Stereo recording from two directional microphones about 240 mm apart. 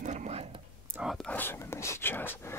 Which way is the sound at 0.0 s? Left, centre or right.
Right.